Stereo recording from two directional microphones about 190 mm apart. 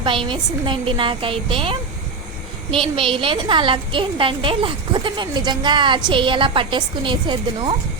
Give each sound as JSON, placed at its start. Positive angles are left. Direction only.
{"t": 0.0, "sound": "a woman's voice", "side_deg": -25}
{"t": 2.7, "sound": "a woman's voice", "side_deg": -25}